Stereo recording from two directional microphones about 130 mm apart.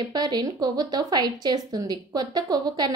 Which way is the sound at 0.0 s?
30° right (ahead or behind).